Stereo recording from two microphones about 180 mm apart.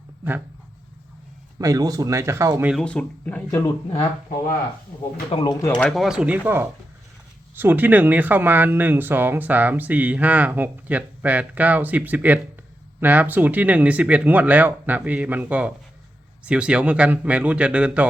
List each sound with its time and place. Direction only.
1.5 s speech: 20° right (ahead or behind)
2.6 s speech: 5° left (ahead or behind)
5.3 s speech: 25° left (ahead or behind)
5.7 s speech: 5° left (ahead or behind)